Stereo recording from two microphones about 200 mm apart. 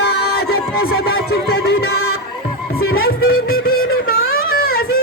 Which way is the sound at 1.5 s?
50° left (ahead or behind).